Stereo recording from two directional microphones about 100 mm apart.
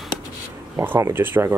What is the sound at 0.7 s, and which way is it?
Speech, 25° right (ahead or behind).